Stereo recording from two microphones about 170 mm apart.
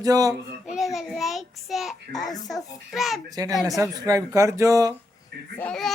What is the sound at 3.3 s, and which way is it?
Speech, 20° right (ahead or behind).